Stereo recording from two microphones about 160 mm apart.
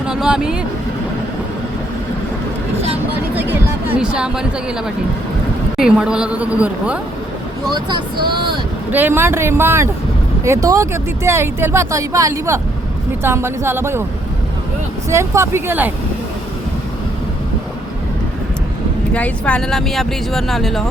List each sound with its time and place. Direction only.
0.0 s speech: 5° right (ahead or behind)
3.3 s a sound: 15° right (ahead or behind)
5.7 s speech: 5° right (ahead or behind)
7.7 s speech: 25° right (ahead or behind)
8.9 s speech: 10° right (ahead or behind)
15.1 s speech: 15° right (ahead or behind)
19.1 s speech: 10° left (ahead or behind)